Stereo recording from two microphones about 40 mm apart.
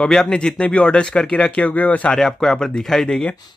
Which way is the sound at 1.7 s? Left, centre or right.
Left.